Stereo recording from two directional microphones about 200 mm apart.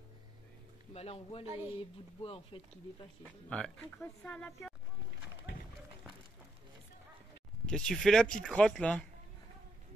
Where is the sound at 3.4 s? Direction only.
5° left (ahead or behind).